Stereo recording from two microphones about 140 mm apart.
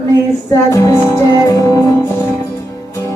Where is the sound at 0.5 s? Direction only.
25° left (ahead or behind).